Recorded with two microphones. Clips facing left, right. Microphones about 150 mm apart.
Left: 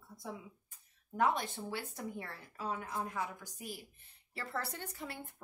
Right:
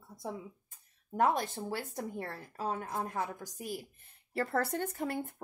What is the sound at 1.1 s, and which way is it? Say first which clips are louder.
Speech: right 3 dB; 45° right (ahead or behind).